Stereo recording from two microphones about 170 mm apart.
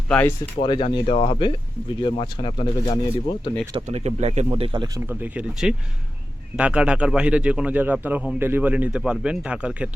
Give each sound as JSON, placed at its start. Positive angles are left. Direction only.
{"t": 0.1, "sound": "speech", "side_deg": 10}
{"t": 0.6, "sound": "speech", "side_deg": 30}
{"t": 3.8, "sound": "speech", "side_deg": -40}
{"t": 4.9, "sound": "a man's voice", "side_deg": -10}